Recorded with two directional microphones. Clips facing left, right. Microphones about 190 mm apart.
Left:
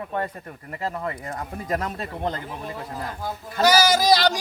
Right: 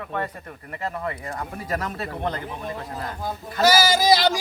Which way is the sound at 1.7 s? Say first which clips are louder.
Left 1 dB; 25° left (ahead or behind).